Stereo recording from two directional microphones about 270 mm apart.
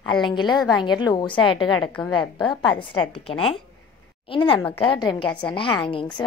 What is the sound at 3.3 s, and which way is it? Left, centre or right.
A woman's voice, left.